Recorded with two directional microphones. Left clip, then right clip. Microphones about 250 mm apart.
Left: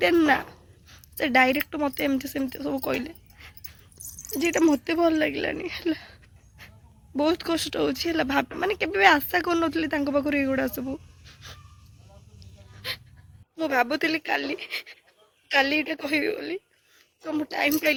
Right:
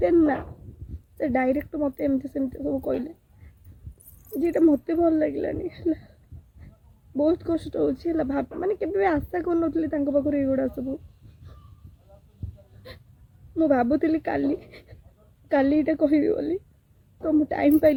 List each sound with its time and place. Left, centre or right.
0.0 s speech: centre
4.4 s speech: centre
7.2 s speech: centre
13.6 s speech: centre